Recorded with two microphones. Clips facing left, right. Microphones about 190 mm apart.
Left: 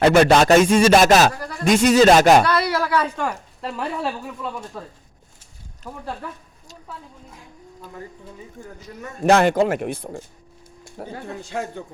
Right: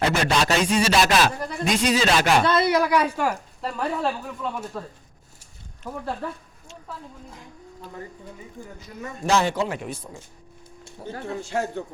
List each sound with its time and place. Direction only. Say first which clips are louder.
0.0 s speech: left 9 dB; 55° left (ahead or behind)
1.4 s music: right 2 dB; 20° right (ahead or behind)
1.6 s speech: left 8 dB; 45° left (ahead or behind)
2.4 s a woman's voice: right 1 dB; 20° right (ahead or behind); by 4.9 s 10° left (ahead or behind)
9.2 s speech: left 7 dB; 60° left (ahead or behind)